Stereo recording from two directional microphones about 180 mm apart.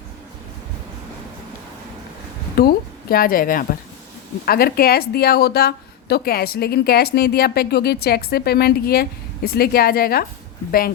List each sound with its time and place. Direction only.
2.6 s a woman's voice: 55° left (ahead or behind)